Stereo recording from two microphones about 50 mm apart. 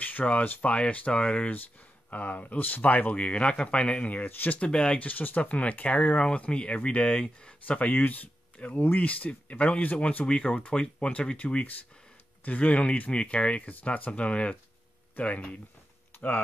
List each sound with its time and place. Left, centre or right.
0.0 s speech: left
4.6 s speech: centre
4.9 s speech: left
8.5 s speech: left
8.8 s speech: left
10.2 s speech: left
13.6 s speech: left